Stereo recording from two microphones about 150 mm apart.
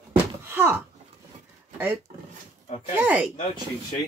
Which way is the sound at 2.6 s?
45° left (ahead or behind).